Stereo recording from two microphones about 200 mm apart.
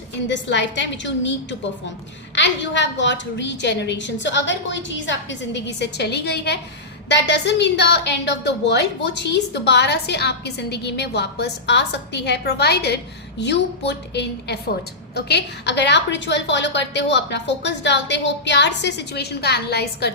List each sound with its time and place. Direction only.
0.3 s a woman's voice: 65° left (ahead or behind)